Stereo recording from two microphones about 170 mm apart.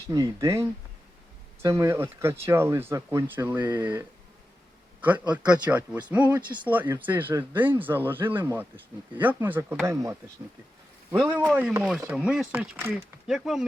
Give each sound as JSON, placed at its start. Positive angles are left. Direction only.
{"t": 0.1, "sound": "speech", "side_deg": -20}
{"t": 1.6, "sound": "a man's voice", "side_deg": -15}